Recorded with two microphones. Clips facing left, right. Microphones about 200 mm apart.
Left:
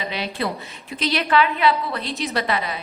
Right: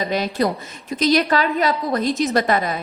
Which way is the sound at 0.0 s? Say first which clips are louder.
Right 6 dB; 45° right (ahead or behind).